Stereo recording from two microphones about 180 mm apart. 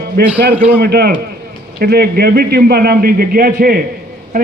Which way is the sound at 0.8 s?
60° right (ahead or behind).